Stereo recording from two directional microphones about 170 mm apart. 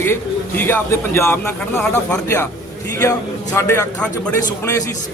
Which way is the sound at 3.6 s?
15° left (ahead or behind).